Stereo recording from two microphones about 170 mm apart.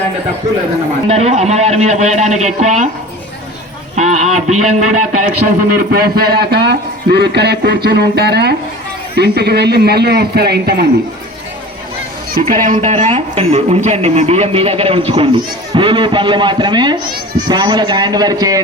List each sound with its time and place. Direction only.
1.0 s a man's voice: 40° right (ahead or behind)
3.9 s a man's voice: 45° right (ahead or behind); by 10.8 s 70° right (ahead or behind)
12.4 s a man's voice: 50° right (ahead or behind); by 18.6 s 20° right (ahead or behind)